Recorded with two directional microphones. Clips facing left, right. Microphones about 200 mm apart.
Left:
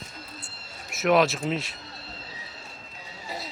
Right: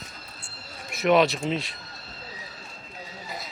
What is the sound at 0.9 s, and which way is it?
Speech, centre (ahead or behind).